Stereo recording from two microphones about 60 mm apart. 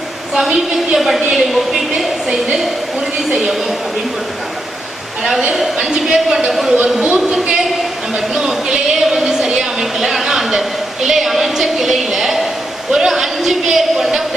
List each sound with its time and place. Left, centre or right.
0.3 s a man's voice: centre
1.3 s a sound: centre
3.4 s a man's voice: centre
5.7 s speech: centre
7.0 s speech: centre
8.1 s a sound: centre
12.9 s a man's voice: centre